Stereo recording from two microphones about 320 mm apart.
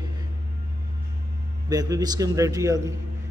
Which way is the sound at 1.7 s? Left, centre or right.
Centre.